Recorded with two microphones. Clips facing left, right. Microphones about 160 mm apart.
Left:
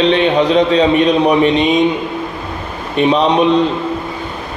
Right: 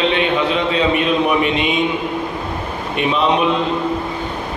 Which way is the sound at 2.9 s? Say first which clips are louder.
Left 7 dB; 35° left (ahead or behind).